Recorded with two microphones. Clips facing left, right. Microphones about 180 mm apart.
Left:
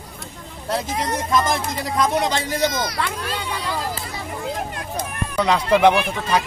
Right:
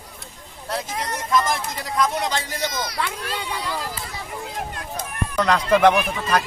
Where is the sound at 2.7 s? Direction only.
50° left (ahead or behind).